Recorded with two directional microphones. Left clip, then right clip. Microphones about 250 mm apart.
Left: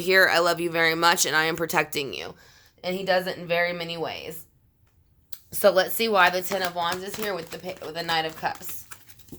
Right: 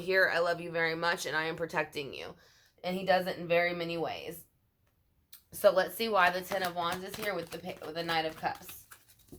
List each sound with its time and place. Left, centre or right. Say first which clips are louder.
0.0 s speech: left 8 dB; left
2.8 s speech: left 5 dB; left
5.3 s speech: left 6 dB; left